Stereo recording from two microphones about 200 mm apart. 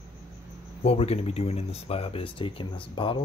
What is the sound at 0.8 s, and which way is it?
Speech, 30° left (ahead or behind).